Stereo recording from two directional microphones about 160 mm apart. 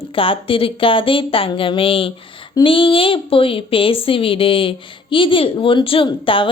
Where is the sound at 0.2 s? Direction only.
35° left (ahead or behind).